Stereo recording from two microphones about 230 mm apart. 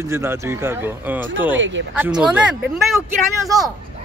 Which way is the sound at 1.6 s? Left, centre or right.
Right.